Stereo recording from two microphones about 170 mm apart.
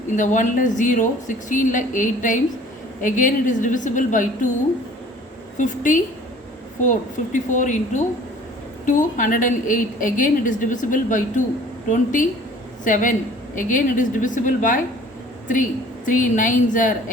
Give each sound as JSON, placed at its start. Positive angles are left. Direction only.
{"t": 0.2, "sound": "a woman's voice", "side_deg": 50}
{"t": 5.5, "sound": "a woman's voice", "side_deg": 50}
{"t": 7.3, "sound": "a woman's voice", "side_deg": 50}
{"t": 16.0, "sound": "a woman's voice", "side_deg": 50}